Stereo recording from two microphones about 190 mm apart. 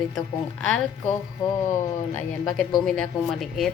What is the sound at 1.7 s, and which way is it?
Speech, 15° left (ahead or behind).